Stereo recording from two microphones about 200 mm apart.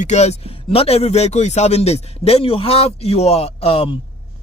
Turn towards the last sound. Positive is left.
turn(degrees=30)  # may be behind; listen again after turning